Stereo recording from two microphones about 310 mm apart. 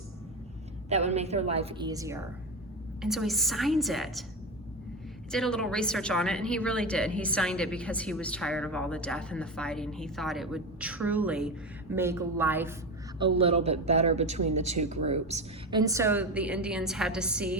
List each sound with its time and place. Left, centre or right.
0.9 s a woman's voice: right; by 4.2 s centre
5.3 s a woman's voice: centre